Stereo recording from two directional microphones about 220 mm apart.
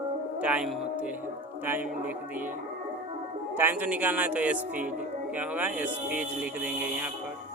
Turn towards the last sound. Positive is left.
turn(degrees=-5)  # may be behind; listen again after turning